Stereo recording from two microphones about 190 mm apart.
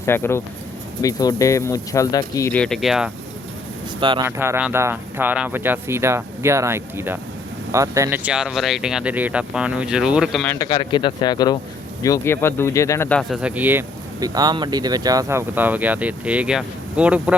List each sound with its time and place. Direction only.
0.0 s speech: 15° left (ahead or behind)
2.5 s speech: 5° left (ahead or behind)
4.3 s speech: 10° right (ahead or behind)
10.4 s speech: 10° left (ahead or behind)
10.7 s speech: 25° left (ahead or behind); by 13.4 s 5° left (ahead or behind)
13.4 s speech: 10° right (ahead or behind)